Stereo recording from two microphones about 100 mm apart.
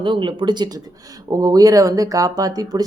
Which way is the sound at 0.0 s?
55° right (ahead or behind).